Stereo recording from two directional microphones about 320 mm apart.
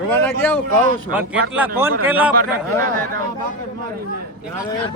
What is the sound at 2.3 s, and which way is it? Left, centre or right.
Speech, right.